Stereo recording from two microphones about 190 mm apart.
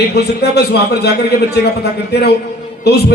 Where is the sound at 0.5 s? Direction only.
60° left (ahead or behind).